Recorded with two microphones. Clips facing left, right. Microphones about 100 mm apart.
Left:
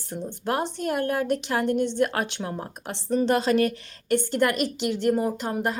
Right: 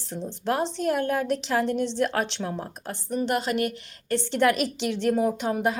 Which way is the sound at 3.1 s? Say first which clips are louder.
Left 4 dB; 35° left (ahead or behind).